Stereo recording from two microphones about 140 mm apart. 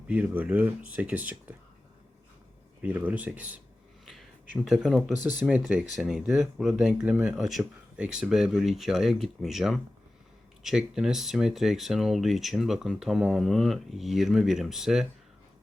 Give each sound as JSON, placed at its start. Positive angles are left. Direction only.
{"t": 0.1, "sound": "speech", "side_deg": -10}
{"t": 2.8, "sound": "speech", "side_deg": -10}
{"t": 4.6, "sound": "speech", "side_deg": 0}
{"t": 5.2, "sound": "speech", "side_deg": -15}